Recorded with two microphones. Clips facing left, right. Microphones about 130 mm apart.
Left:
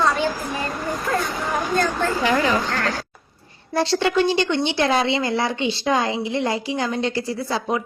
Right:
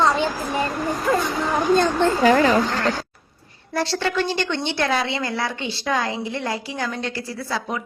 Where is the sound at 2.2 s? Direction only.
40° right (ahead or behind).